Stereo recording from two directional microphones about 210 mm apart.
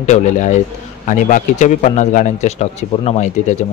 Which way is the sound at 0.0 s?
35° left (ahead or behind).